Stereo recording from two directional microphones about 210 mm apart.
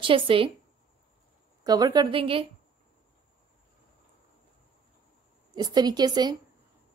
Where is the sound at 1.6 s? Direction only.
20° right (ahead or behind).